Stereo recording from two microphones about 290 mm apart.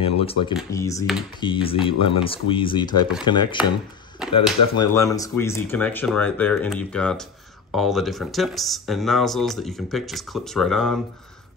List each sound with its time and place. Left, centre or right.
0.0 s speech: centre
4.2 s a sound: centre
4.9 s speech: centre